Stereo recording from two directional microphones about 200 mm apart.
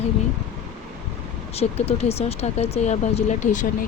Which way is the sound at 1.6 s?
30° left (ahead or behind).